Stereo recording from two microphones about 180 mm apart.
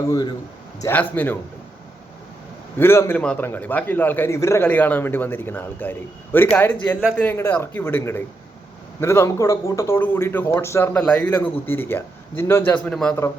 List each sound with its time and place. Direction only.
0.1 s a man's voice: 20° left (ahead or behind)
0.8 s speech: 10° left (ahead or behind)
2.7 s speech: 15° left (ahead or behind)